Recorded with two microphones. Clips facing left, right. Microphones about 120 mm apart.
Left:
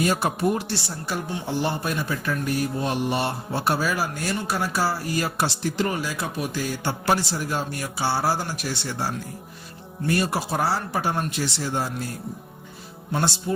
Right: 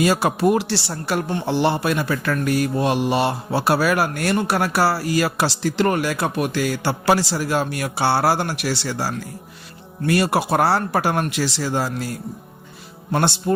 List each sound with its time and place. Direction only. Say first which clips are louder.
0.0 s speech: right 5 dB; 90° right
10.1 s speech: right 6 dB; 70° right (ahead or behind); by 12.1 s 90° right
13.1 s speech: right 5 dB; 65° right (ahead or behind)